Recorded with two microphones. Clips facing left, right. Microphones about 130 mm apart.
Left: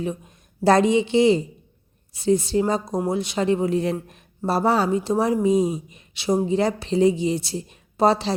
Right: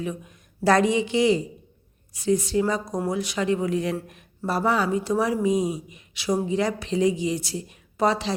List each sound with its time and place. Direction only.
0.0 s speech: 30° left (ahead or behind)